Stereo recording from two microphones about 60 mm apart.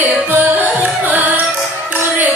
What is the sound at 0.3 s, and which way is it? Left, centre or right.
Music, right.